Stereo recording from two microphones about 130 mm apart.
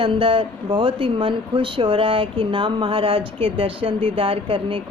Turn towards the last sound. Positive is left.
turn(degrees=-45)  # may be behind; listen again after turning